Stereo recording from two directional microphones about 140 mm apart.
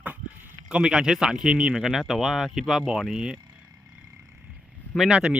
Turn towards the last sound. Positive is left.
turn(degrees=-5)  # may be behind; listen again after turning